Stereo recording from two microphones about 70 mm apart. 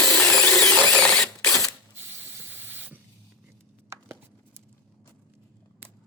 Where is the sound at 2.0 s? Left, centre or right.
Right.